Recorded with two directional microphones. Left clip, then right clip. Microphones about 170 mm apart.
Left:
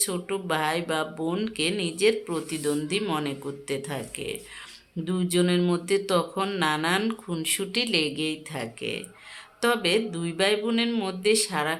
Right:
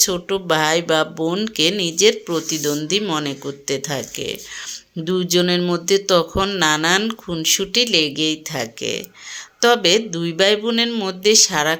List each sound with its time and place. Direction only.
0.0 s speech: 35° right (ahead or behind)